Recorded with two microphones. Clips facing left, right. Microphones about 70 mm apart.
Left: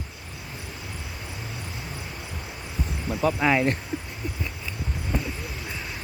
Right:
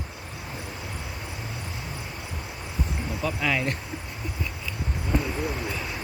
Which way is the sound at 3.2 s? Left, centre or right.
Left.